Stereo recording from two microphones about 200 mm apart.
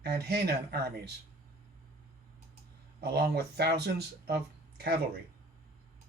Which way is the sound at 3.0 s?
55° right (ahead or behind).